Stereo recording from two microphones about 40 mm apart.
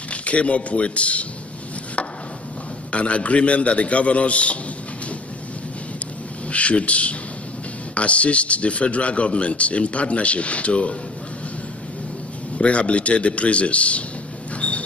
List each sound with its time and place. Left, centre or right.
0.1 s a man's voice: left
2.9 s speech: left
6.5 s speech: left
12.5 s speech: left